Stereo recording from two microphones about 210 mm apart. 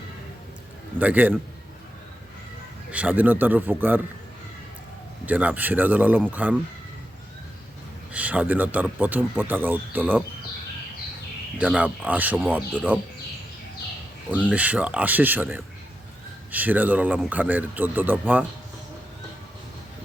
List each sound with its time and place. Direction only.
0.9 s speech: 10° right (ahead or behind)
2.9 s speech: 5° right (ahead or behind)
5.2 s speech: 5° right (ahead or behind)
8.1 s speech: 5° right (ahead or behind)
11.5 s speech: 5° right (ahead or behind)
14.5 s speech: 5° right (ahead or behind)